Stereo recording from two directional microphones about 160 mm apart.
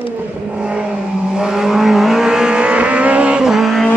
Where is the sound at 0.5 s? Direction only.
5° right (ahead or behind).